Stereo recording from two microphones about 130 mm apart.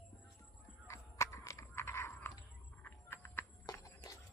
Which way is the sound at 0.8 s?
20° left (ahead or behind).